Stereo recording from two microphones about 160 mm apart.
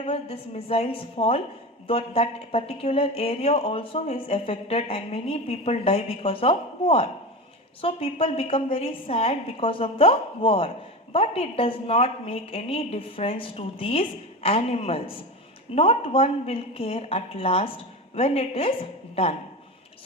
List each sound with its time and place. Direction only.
0.0 s speech: 40° left (ahead or behind)